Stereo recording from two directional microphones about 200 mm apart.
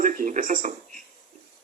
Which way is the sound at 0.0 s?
40° right (ahead or behind).